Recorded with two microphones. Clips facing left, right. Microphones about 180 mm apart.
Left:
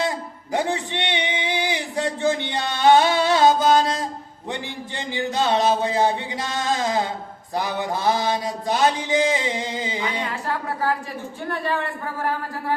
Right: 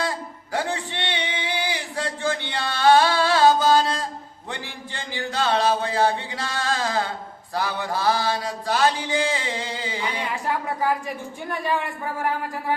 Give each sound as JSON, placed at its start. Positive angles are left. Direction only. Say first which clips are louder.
{"t": 0.5, "sound": "a sound", "louder": "left 3 dB", "side_deg": 20}
{"t": 4.5, "sound": "speech", "louder": "left 4 dB", "side_deg": 20}
{"t": 11.5, "sound": "speech", "louder": "even", "side_deg": -15}